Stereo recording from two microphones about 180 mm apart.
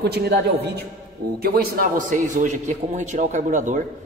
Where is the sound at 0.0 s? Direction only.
65° right (ahead or behind).